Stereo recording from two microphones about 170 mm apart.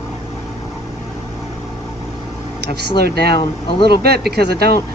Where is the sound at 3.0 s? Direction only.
70° right (ahead or behind).